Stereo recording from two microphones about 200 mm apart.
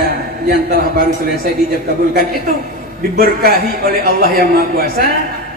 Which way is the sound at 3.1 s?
50° right (ahead or behind).